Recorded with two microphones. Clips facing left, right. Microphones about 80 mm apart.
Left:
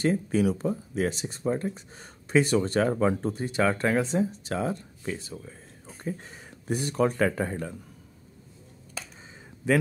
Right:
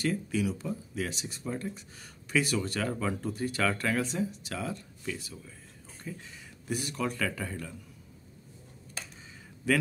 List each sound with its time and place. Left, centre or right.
0.0 s speech: left
9.6 s a man's voice: left